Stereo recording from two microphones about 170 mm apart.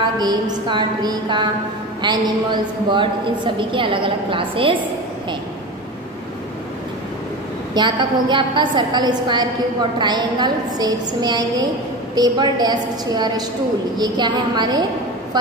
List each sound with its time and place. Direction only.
0.2 s a woman's voice: 25° right (ahead or behind)
7.7 s a woman's voice: 25° right (ahead or behind)